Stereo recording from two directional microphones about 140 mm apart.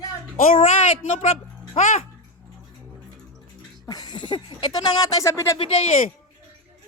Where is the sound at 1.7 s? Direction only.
60° left (ahead or behind).